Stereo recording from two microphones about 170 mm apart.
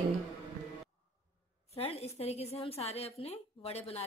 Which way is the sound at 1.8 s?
35° left (ahead or behind).